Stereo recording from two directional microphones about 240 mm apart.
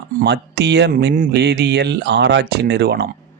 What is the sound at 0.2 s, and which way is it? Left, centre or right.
Speech, right.